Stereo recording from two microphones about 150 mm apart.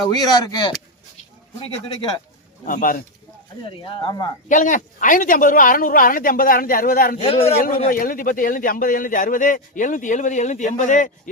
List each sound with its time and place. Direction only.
0.1 s speech: 25° left (ahead or behind)
1.6 s speech: 40° left (ahead or behind)
2.6 s speech: 65° left (ahead or behind)
3.7 s speech: 35° left (ahead or behind)
4.4 s speech: 60° left (ahead or behind); by 7.2 s 75° left (ahead or behind)
7.2 s speech: 40° left (ahead or behind)
7.9 s speech: 65° left (ahead or behind)